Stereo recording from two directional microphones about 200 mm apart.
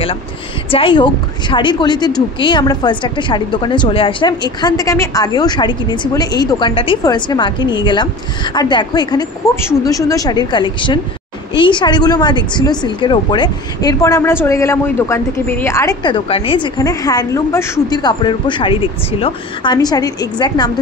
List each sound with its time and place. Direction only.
0.7 s a woman's voice: 25° left (ahead or behind)